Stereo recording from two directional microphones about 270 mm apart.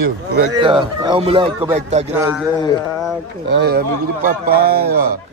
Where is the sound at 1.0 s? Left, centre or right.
Centre.